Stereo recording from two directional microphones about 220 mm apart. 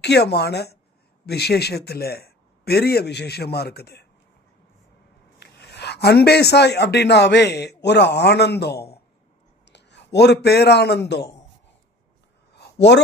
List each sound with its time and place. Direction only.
0.0 s a man's voice: 50° left (ahead or behind)
5.4 s a man's voice: 50° left (ahead or behind)
12.5 s a sound: 50° left (ahead or behind)